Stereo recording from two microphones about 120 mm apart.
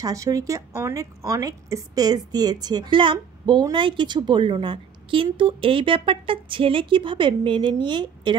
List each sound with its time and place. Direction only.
0.0 s a woman's voice: 30° right (ahead or behind)